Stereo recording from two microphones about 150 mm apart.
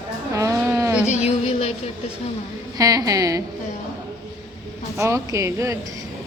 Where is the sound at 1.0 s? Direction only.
45° left (ahead or behind).